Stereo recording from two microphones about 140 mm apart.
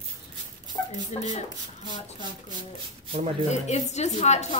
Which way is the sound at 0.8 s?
15° left (ahead or behind).